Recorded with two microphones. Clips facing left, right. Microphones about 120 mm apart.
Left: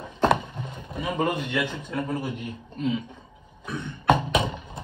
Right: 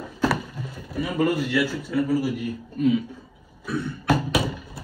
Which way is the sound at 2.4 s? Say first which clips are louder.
Right 6 dB; 25° left (ahead or behind).